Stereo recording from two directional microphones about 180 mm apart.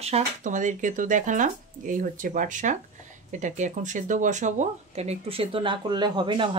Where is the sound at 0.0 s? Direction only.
40° right (ahead or behind).